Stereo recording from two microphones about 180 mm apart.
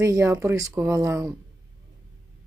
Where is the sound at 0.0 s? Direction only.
15° right (ahead or behind).